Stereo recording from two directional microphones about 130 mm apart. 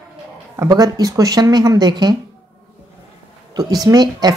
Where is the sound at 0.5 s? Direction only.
25° right (ahead or behind).